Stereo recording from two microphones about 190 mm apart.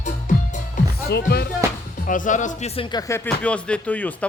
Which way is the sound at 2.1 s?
40° left (ahead or behind).